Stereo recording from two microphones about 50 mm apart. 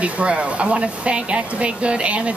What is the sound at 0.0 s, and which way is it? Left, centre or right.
Speech, right.